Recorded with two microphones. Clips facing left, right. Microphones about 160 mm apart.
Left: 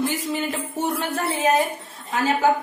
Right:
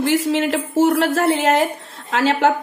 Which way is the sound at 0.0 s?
80° right.